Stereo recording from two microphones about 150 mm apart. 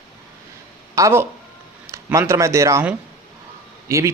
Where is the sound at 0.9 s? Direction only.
20° right (ahead or behind).